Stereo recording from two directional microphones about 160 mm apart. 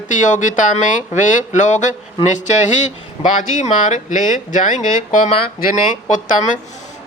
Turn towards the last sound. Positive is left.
turn(degrees=55)  # may be behind; listen again after turning